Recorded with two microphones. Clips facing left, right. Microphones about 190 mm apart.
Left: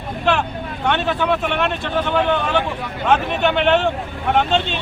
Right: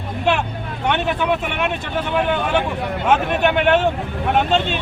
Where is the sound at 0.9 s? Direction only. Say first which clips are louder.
Even; 15° right (ahead or behind).